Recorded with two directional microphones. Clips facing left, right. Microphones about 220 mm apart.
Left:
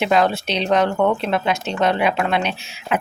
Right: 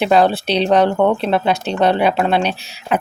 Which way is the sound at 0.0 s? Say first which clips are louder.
Right 4 dB; 35° right (ahead or behind).